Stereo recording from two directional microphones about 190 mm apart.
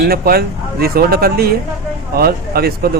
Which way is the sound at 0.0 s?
55° right (ahead or behind).